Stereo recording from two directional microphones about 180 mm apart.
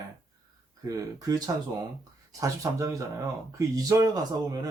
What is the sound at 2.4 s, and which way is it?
Speech, 20° right (ahead or behind).